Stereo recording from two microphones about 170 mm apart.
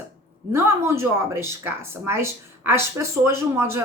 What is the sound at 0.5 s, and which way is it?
A woman's voice, 15° right (ahead or behind).